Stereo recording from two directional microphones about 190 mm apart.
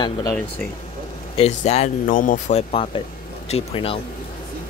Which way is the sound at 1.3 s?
35° left (ahead or behind).